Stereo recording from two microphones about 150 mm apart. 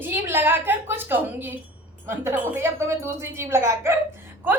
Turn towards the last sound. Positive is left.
turn(degrees=-15)  # may be behind; listen again after turning